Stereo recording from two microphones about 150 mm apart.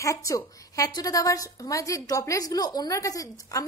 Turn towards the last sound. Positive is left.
turn(degrees=20)  # may be behind; listen again after turning